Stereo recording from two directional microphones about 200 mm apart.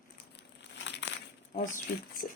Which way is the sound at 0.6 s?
60° left (ahead or behind).